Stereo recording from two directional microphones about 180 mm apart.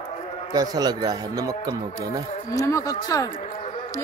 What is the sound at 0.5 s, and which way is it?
Speech, 20° right (ahead or behind).